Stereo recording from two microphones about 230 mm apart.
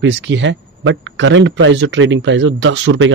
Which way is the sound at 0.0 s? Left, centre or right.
Right.